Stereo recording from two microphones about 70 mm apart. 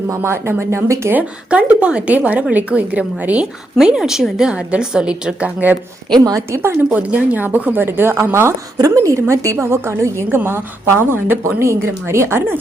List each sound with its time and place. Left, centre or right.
0.2 s a woman's voice: right
1.1 s speech: centre
3.8 s a woman's voice: centre
6.1 s a woman's voice: right
6.5 s a woman's voice: right
6.9 s a woman's voice: right
8.8 s a woman's voice: right